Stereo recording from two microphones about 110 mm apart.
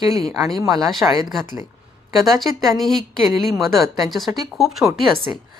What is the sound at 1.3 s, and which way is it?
Speech, centre (ahead or behind).